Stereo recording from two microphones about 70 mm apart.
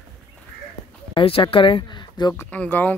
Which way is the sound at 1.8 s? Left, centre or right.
Left.